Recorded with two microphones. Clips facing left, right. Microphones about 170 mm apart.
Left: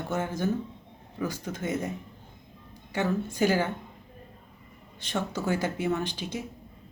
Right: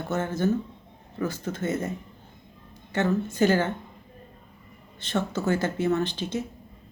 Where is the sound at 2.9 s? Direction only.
10° left (ahead or behind).